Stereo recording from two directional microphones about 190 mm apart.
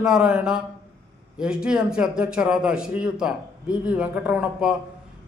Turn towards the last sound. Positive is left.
turn(degrees=-5)  # may be behind; listen again after turning